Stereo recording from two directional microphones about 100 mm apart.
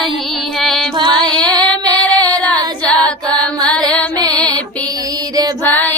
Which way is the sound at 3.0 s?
10° left (ahead or behind).